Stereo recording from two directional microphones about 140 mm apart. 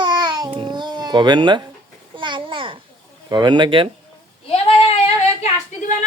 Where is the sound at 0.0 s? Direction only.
30° right (ahead or behind).